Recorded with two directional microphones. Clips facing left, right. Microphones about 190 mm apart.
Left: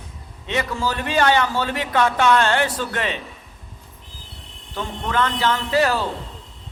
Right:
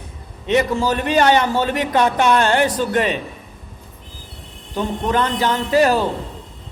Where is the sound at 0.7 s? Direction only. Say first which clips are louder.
Right 5 dB; 20° right (ahead or behind).